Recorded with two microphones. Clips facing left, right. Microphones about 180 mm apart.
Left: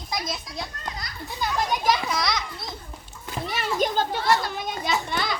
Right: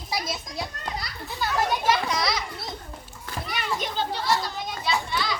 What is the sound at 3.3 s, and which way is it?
Children playing, 30° left (ahead or behind).